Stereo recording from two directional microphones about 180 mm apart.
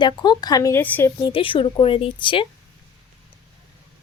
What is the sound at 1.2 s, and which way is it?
A woman's voice, 30° left (ahead or behind).